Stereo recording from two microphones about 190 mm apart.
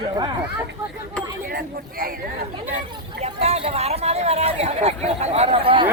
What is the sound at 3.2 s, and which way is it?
Speech, 35° right (ahead or behind).